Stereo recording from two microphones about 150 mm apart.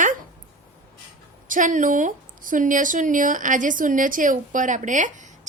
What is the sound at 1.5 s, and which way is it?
Speech, 60° right (ahead or behind).